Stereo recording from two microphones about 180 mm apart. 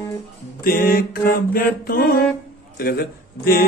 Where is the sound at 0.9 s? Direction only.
55° left (ahead or behind).